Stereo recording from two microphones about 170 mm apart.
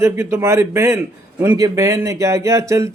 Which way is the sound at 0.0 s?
15° right (ahead or behind).